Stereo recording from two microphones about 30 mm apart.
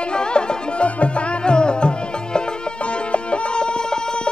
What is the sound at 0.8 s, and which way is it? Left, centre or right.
Music, left.